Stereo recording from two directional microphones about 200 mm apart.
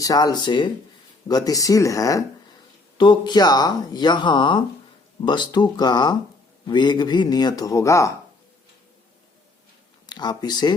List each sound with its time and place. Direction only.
0.0 s speech: 20° left (ahead or behind)
10.1 s speech: 20° left (ahead or behind)